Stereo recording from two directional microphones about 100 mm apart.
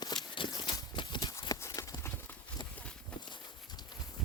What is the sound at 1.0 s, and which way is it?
Clip-clop, 40° left (ahead or behind).